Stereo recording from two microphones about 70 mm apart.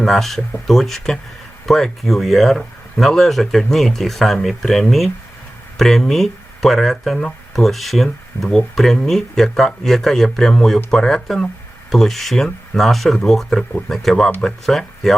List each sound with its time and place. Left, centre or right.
0.0 s speech: centre